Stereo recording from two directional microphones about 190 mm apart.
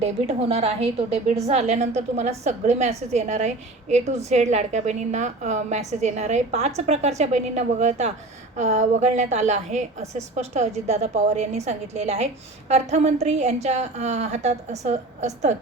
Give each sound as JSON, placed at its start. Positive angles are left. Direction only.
{"t": 0.0, "sound": "a woman's voice", "side_deg": -35}